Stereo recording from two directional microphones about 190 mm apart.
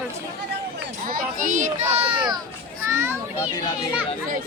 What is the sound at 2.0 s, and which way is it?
Speech, 25° right (ahead or behind).